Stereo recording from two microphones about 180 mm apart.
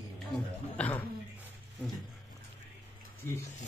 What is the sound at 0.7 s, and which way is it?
Speech, 10° left (ahead or behind).